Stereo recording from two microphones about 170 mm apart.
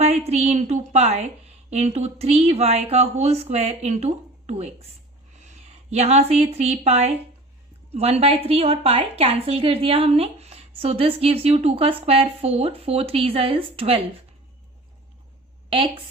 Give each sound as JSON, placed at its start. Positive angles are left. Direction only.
{"t": 0.0, "sound": "a woman's voice", "side_deg": -40}
{"t": 15.7, "sound": "a woman's voice", "side_deg": -30}